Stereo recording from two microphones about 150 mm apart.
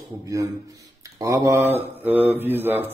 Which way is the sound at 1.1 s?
25° right (ahead or behind).